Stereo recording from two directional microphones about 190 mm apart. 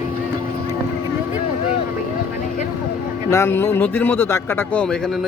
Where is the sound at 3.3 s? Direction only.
15° left (ahead or behind).